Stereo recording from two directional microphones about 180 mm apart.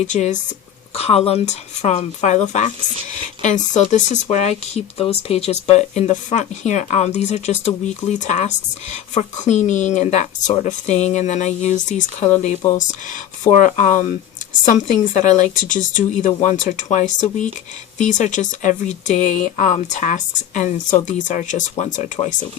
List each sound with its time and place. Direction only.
0.0 s speech: 40° left (ahead or behind)